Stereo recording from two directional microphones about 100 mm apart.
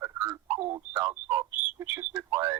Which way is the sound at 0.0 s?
30° right (ahead or behind).